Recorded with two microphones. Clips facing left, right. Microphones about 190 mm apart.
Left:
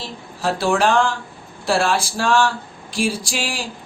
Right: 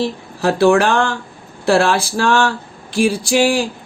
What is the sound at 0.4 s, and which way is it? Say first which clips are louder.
Speech: right 6 dB; 60° right (ahead or behind).